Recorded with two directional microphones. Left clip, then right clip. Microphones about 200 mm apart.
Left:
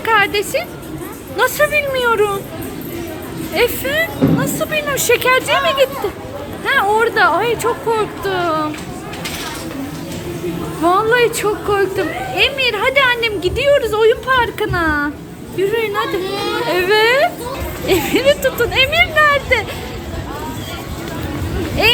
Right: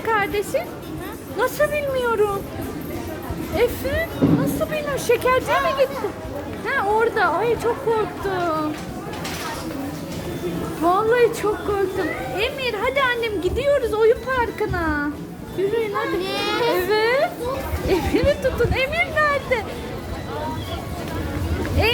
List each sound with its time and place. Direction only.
0.0 s music: centre (ahead or behind)
1.4 s speech: centre (ahead or behind)
3.5 s speech: centre (ahead or behind)
10.8 s speech: 5° right (ahead or behind)
16.2 s speech: 25° right (ahead or behind)
16.7 s speech: 5° left (ahead or behind)
21.8 s speech: 5° right (ahead or behind)